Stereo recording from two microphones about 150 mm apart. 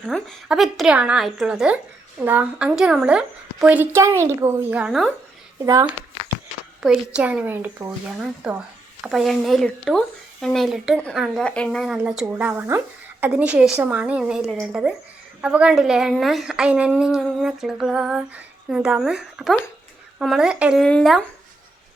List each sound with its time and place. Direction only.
0.1 s a woman's voice: centre (ahead or behind)
5.6 s a sound: 20° right (ahead or behind)
6.8 s a woman's voice: 5° right (ahead or behind)
8.2 s a woman's voice: 5° right (ahead or behind)
12.2 s a woman's voice: 10° right (ahead or behind)
20.8 s a woman's voice: 5° left (ahead or behind)